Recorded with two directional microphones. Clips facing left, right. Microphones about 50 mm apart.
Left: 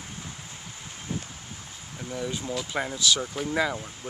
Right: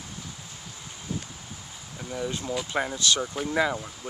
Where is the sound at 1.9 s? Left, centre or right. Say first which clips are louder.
Right 1 dB; centre.